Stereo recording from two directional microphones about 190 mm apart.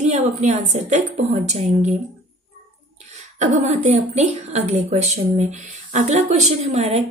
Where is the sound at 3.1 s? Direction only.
35° right (ahead or behind).